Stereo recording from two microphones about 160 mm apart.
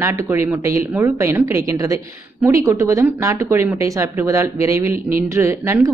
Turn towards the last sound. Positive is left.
turn(degrees=-15)  # may be behind; listen again after turning